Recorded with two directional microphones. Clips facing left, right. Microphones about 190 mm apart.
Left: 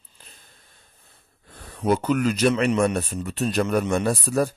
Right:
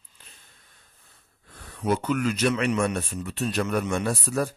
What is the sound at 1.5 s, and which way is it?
Speech, 30° left (ahead or behind).